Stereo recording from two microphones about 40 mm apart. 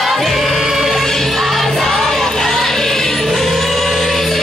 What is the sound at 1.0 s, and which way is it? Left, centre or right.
Music, centre.